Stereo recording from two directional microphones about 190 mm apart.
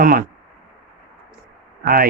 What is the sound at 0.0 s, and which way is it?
Speech, 50° right (ahead or behind).